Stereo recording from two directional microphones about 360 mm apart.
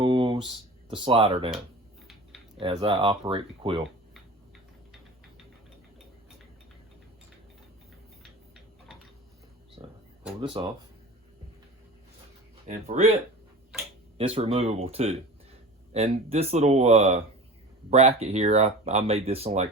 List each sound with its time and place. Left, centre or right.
0.0 s a sound: centre
0.4 s speech: centre
2.6 s speech: centre
9.8 s a sound: centre
10.4 s speech: centre
12.6 s speech: centre
14.2 s speech: centre